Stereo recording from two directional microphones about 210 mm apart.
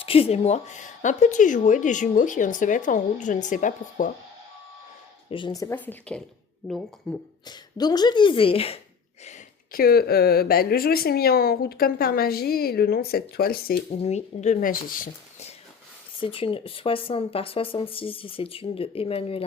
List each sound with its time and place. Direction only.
0.0 s a woman's voice: 25° left (ahead or behind)
5.3 s speech: 20° left (ahead or behind); by 7.2 s 5° left (ahead or behind)
7.4 s speech: 20° left (ahead or behind)
9.2 s a woman's voice: 40° left (ahead or behind)
13.9 s a woman's voice: 30° left (ahead or behind)
16.2 s speech: 25° left (ahead or behind)